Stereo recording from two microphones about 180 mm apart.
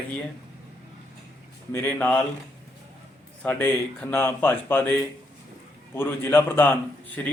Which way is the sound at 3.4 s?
10° left (ahead or behind).